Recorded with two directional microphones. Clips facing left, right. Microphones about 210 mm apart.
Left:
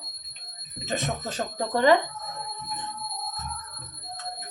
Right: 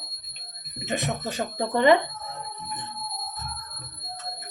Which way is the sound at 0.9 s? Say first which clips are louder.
Right 1 dB; 15° right (ahead or behind).